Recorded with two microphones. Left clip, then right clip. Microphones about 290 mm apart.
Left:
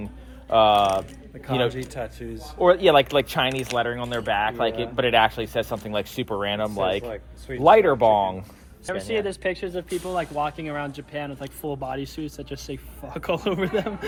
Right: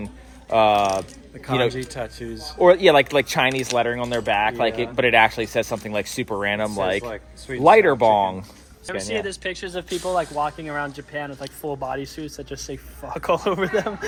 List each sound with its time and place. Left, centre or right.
0.5 s speech: centre
1.7 s speech: right
2.8 s speech: centre
7.0 s speech: right
7.6 s speech: centre
9.0 s speech: centre
10.1 s speech: centre